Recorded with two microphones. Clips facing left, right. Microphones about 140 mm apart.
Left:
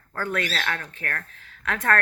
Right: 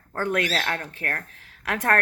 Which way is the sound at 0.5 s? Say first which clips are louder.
Right 2 dB; 30° right (ahead or behind).